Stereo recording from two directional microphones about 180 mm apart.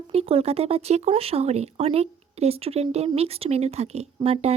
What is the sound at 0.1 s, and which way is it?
Speech, 35° right (ahead or behind).